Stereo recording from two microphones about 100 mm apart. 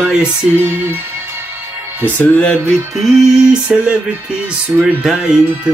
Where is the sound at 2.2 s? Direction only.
10° left (ahead or behind).